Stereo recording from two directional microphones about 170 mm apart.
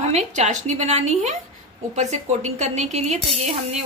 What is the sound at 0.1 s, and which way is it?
A woman's voice, 45° right (ahead or behind).